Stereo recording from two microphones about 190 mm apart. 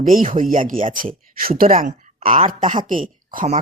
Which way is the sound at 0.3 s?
45° right (ahead or behind).